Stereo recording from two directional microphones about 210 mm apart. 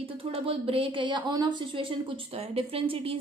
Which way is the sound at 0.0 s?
25° right (ahead or behind).